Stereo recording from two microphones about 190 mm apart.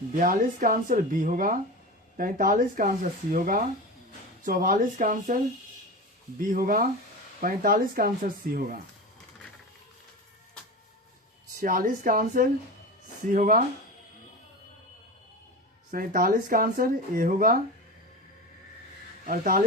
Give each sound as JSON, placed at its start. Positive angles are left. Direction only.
{"t": 0.2, "sound": "speech", "side_deg": -45}
{"t": 6.4, "sound": "speech", "side_deg": -45}
{"t": 11.6, "sound": "speech", "side_deg": -50}
{"t": 15.9, "sound": "speech", "side_deg": -45}
{"t": 19.2, "sound": "speech", "side_deg": -45}